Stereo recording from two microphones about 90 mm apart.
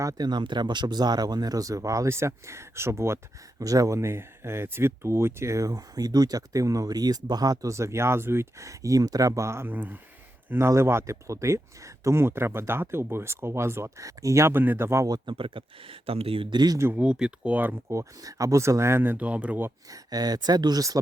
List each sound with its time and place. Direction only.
0.0 s speech: 45° right (ahead or behind)
3.6 s speech: 40° right (ahead or behind)
15.3 s speech: 70° right (ahead or behind); by 16.5 s 90° right
16.5 s speech: 50° right (ahead or behind)
16.9 s speech: 10° right (ahead or behind)
17.9 s speech: 40° right (ahead or behind); by 19.7 s 20° right (ahead or behind)
19.9 s speech: 45° right (ahead or behind)